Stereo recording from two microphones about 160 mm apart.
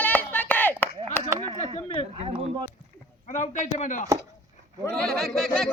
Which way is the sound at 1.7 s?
40° left (ahead or behind).